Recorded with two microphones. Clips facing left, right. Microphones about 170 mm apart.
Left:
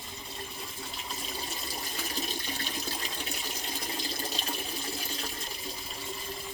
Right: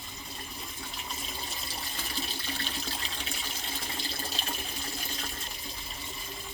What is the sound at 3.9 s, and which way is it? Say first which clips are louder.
Water: left 3 dB; 40° left (ahead or behind).